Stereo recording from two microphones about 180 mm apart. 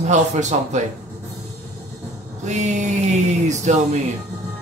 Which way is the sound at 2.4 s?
40° right (ahead or behind).